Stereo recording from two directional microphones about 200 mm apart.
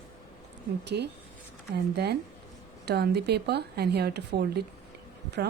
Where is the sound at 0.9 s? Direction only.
55° right (ahead or behind).